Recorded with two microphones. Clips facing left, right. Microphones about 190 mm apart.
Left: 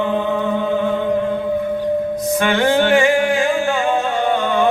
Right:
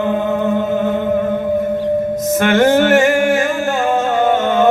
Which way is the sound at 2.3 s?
45° right (ahead or behind).